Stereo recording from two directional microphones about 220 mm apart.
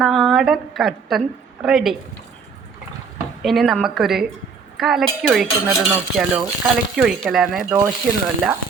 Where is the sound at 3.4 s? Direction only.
Centre (ahead or behind).